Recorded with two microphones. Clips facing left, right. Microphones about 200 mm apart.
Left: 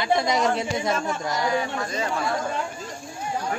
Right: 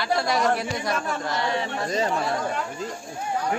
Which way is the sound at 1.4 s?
25° right (ahead or behind).